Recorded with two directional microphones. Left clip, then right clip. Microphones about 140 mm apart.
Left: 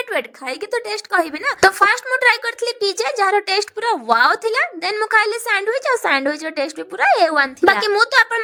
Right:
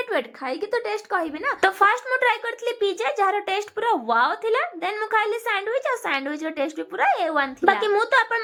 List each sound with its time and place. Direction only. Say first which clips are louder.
0.1 s speech: left 3 dB; 35° left (ahead or behind)
4.1 s a woman's voice: left 8 dB; 60° left (ahead or behind)